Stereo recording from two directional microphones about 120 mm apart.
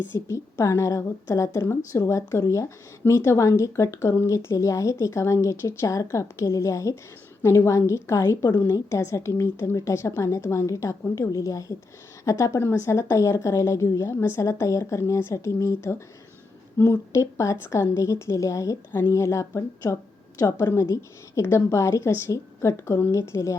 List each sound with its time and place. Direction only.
0.3 s a woman's voice: 25° left (ahead or behind)